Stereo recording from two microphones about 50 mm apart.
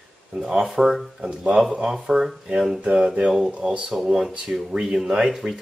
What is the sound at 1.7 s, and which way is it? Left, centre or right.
Speech, centre.